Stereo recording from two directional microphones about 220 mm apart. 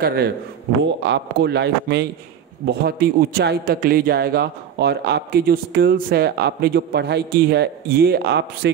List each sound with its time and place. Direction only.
0.0 s a man's voice: 45° right (ahead or behind)